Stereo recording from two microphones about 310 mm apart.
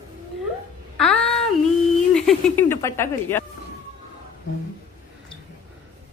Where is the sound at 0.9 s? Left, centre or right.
Centre.